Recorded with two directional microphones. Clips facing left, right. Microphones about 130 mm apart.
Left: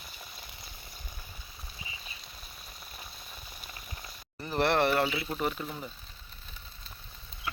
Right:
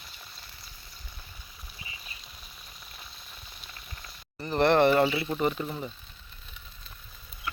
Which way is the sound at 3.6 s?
10° left (ahead or behind).